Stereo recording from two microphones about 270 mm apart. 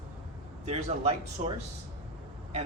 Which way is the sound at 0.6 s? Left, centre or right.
Right.